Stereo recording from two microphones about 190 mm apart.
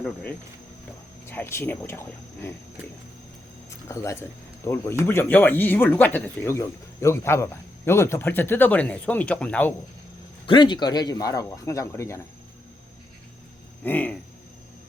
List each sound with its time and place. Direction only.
0.0 s speech: 5° left (ahead or behind)
3.8 s speech: 15° left (ahead or behind)
10.4 s speech: 25° left (ahead or behind)
13.8 s speech: 10° left (ahead or behind)